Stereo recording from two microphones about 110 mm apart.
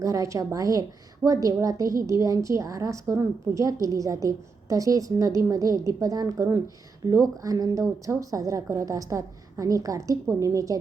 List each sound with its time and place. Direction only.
0.0 s a woman's voice: 30° right (ahead or behind)